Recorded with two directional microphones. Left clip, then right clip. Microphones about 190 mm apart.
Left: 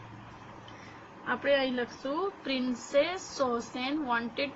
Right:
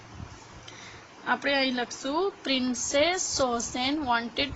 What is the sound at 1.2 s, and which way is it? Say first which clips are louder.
A woman's voice: right 2 dB; 65° right (ahead or behind).